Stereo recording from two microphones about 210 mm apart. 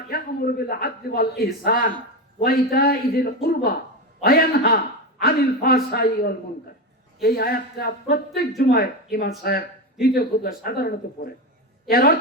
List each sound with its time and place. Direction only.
0.1 s speech: 45° left (ahead or behind)